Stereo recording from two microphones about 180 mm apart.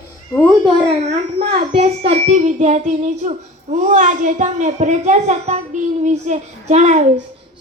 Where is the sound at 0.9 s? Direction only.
35° right (ahead or behind).